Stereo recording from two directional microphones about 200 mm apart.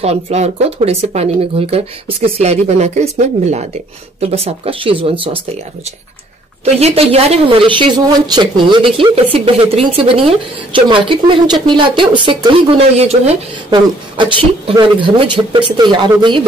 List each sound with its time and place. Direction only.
0.0 s speech: 35° right (ahead or behind)
6.6 s speech: 30° right (ahead or behind)